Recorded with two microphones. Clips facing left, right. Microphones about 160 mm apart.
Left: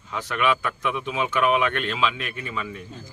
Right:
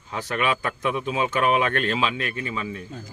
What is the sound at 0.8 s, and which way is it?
A man's voice, 40° right (ahead or behind).